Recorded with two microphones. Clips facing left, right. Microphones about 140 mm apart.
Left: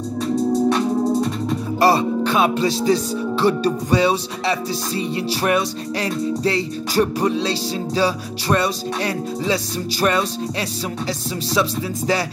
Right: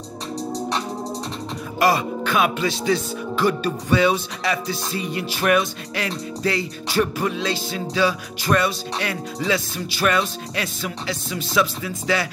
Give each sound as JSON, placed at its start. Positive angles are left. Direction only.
{"t": 1.8, "sound": "speech", "side_deg": 35}